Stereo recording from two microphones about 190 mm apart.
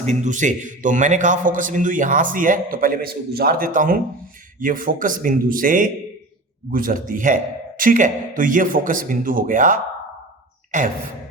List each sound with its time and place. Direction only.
0.0 s a man's voice: 40° right (ahead or behind)